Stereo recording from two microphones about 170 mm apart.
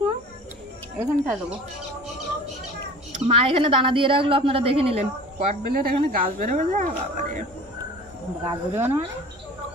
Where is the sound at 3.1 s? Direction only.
35° right (ahead or behind).